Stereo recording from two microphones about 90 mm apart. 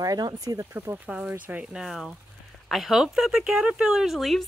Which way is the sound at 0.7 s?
25° right (ahead or behind).